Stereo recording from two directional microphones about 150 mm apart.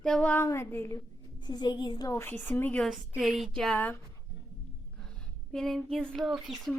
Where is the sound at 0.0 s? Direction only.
5° left (ahead or behind).